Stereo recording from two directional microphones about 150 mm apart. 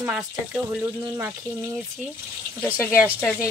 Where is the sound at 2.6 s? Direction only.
15° left (ahead or behind).